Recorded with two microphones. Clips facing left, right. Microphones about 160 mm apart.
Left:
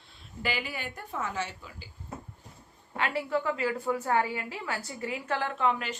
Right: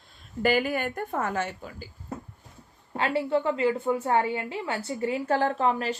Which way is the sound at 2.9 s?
30° right (ahead or behind).